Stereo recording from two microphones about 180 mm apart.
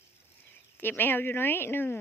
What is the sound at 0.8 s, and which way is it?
Speech, 10° left (ahead or behind).